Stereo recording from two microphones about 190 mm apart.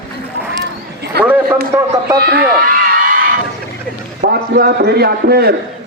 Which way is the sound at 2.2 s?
55° right (ahead or behind).